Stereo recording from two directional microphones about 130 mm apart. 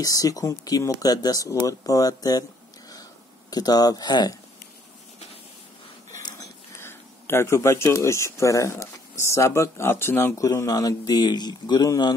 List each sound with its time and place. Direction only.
0.0 s speech: 25° left (ahead or behind)
2.9 s a sound: 30° left (ahead or behind)
6.1 s speech: 25° left (ahead or behind)